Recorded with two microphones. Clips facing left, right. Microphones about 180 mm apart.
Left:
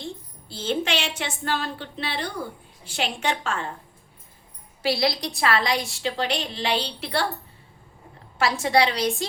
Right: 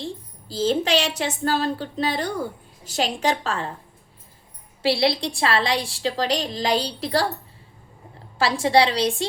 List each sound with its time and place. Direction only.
0.0 s a woman's voice: 35° right (ahead or behind)
4.8 s a woman's voice: 30° right (ahead or behind)
8.4 s a woman's voice: 30° right (ahead or behind)